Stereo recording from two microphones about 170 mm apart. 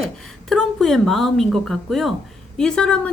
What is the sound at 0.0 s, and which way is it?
A woman's voice, centre (ahead or behind).